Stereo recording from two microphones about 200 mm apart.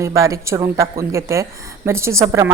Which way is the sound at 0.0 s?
15° right (ahead or behind).